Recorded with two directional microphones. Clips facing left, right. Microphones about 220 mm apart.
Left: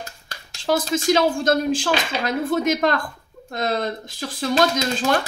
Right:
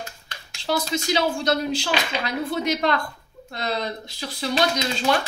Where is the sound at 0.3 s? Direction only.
45° left (ahead or behind).